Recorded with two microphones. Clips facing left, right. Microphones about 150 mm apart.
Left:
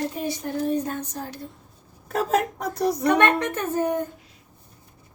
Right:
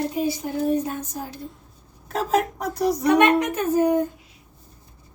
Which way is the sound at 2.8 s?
10° right (ahead or behind).